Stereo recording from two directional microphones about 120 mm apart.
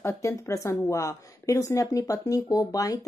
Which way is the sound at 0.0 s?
25° left (ahead or behind).